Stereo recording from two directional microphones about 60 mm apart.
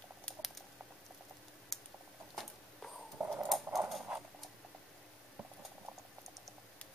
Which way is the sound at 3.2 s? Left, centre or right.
Right.